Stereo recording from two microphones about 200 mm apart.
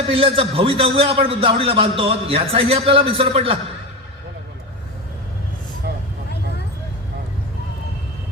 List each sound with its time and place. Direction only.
0.1 s a man's voice: 30° right (ahead or behind)